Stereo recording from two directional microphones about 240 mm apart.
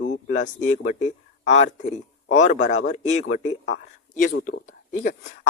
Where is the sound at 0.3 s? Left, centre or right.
Left.